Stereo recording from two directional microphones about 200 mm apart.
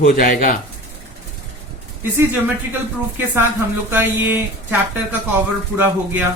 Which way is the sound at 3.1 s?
10° right (ahead or behind).